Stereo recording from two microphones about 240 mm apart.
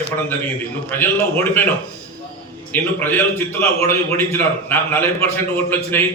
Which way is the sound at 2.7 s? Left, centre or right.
Centre.